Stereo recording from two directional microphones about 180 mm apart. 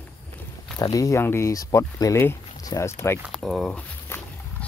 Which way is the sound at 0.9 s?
15° left (ahead or behind).